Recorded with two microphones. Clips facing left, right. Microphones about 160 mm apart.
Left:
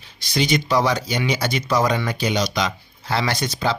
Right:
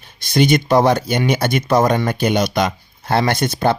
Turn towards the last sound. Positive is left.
turn(degrees=-55)  # may be behind; listen again after turning